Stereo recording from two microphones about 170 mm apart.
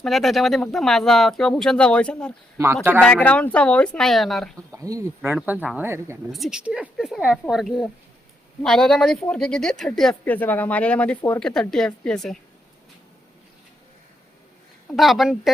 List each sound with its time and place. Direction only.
0.0 s speech: centre (ahead or behind)
4.5 s speech: 20° right (ahead or behind)
6.3 s speech: centre (ahead or behind)
14.9 s speech: centre (ahead or behind)